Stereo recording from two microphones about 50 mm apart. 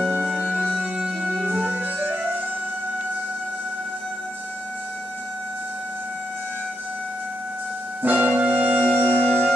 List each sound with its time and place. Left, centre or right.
0.9 s wind instrument: centre
8.0 s music: right
9.1 s music: left